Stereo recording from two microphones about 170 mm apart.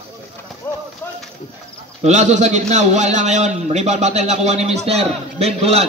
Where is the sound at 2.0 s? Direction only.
40° right (ahead or behind).